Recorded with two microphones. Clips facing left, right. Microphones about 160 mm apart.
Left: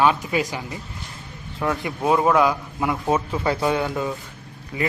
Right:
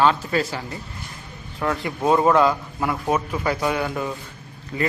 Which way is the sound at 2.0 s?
5° left (ahead or behind).